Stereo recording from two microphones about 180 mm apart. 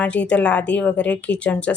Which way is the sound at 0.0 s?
10° left (ahead or behind).